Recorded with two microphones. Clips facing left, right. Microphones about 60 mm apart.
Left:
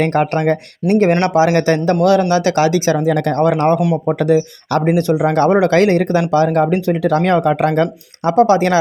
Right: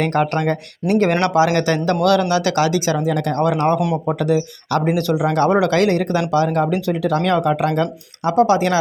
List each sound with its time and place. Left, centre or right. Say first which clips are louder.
0.0 s speech: left 3 dB; left
1.2 s speech: left 3 dB; left